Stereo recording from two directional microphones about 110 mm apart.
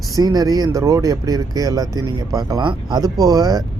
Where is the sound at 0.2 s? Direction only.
35° right (ahead or behind).